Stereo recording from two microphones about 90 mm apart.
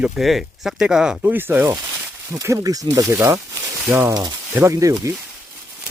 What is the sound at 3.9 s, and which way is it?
Speech, 20° right (ahead or behind).